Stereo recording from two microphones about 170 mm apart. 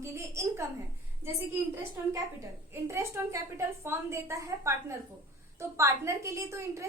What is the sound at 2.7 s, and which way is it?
A woman's voice, 15° right (ahead or behind).